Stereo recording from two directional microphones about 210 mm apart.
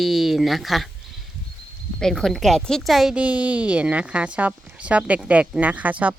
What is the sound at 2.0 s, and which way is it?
A woman's voice, centre (ahead or behind).